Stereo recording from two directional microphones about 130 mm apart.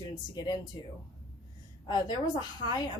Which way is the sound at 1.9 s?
35° left (ahead or behind).